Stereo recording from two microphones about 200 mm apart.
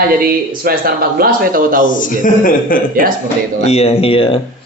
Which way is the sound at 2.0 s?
40° left (ahead or behind).